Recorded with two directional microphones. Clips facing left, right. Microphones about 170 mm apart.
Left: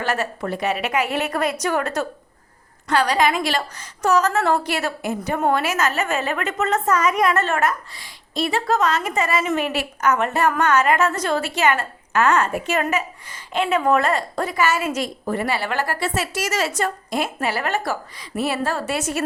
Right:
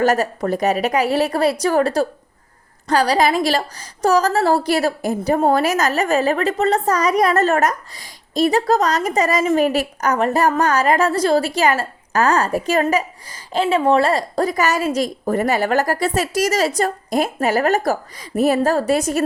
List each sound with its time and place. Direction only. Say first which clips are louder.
0.0 s a woman's voice: right 7 dB; 40° right (ahead or behind)